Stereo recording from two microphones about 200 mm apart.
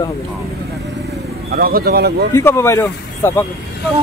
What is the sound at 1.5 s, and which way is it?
Speech, 50° right (ahead or behind).